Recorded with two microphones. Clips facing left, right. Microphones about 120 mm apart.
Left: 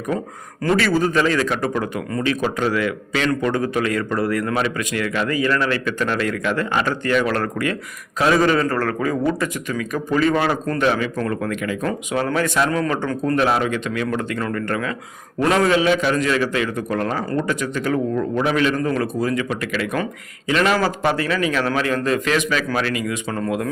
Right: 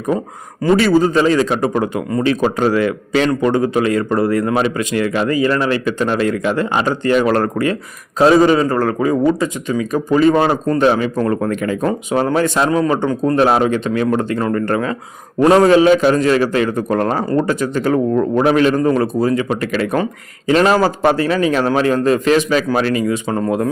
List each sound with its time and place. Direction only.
0.8 s a man's voice: 25° right (ahead or behind)
11.9 s a man's voice: 30° right (ahead or behind)
13.4 s a man's voice: 35° right (ahead or behind)